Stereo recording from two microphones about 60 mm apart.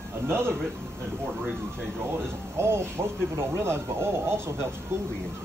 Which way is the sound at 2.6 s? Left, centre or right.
Right.